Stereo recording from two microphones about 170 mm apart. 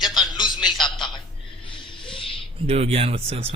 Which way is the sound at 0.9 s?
30° left (ahead or behind).